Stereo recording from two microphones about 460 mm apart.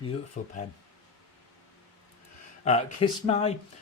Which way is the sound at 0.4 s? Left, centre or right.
Centre.